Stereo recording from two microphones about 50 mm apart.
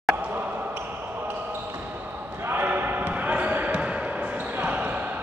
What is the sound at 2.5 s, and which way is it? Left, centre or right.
Basketball bounce, right.